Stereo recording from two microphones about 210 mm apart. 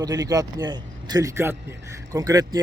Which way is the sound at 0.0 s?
20° right (ahead or behind).